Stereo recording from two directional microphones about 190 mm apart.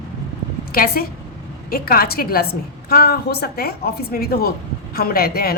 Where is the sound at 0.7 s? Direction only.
50° left (ahead or behind).